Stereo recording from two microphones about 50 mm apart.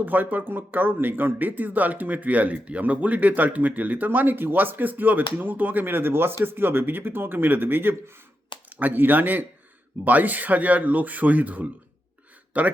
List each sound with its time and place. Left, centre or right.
0.0 s speech: right